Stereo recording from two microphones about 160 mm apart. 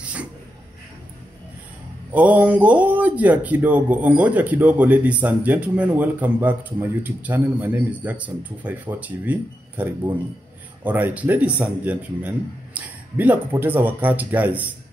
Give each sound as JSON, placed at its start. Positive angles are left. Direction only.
{"t": 2.1, "sound": "speech", "side_deg": -10}